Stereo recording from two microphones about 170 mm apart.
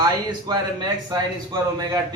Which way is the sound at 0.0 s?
25° right (ahead or behind).